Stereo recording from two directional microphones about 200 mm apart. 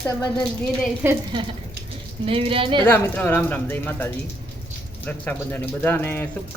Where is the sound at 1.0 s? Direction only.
10° right (ahead or behind).